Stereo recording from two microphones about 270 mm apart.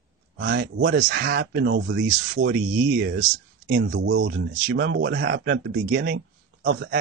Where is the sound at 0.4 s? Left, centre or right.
Right.